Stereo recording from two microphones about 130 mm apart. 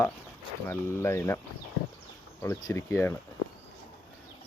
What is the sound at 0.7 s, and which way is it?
Speech, 20° left (ahead or behind).